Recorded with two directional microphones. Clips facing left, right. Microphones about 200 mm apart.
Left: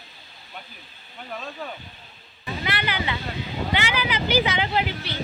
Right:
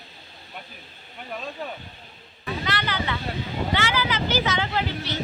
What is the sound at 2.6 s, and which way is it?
Speech, 10° left (ahead or behind).